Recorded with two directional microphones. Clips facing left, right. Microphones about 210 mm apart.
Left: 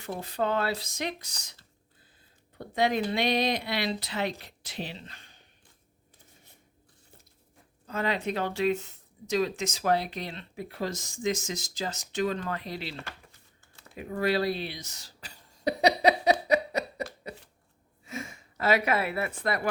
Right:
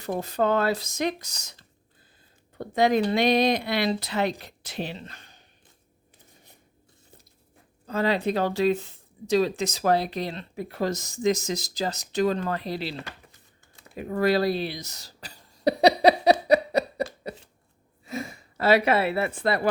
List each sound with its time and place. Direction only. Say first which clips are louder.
0.0 s speech: right 5 dB; 45° right (ahead or behind)
2.6 s speech: right 5 dB; 45° right (ahead or behind)
7.9 s speech: right 5 dB; 35° right (ahead or behind)
13.9 s throat clearing: right 5 dB; 40° right (ahead or behind)
17.2 s shuffling cards: right 5 dB; 35° right (ahead or behind)
18.0 s speech: right 5 dB; 35° right (ahead or behind)